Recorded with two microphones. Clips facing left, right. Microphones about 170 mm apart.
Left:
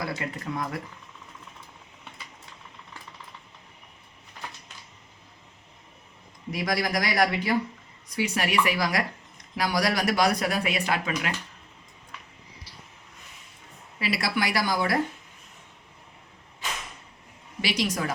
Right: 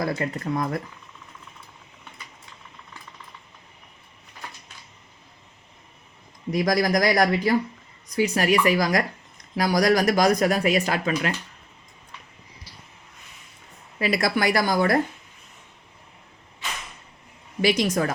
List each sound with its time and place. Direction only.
0.0 s speech: 40° right (ahead or behind)
6.5 s speech: 40° right (ahead or behind)
14.0 s speech: 45° right (ahead or behind)
17.6 s speech: 50° right (ahead or behind)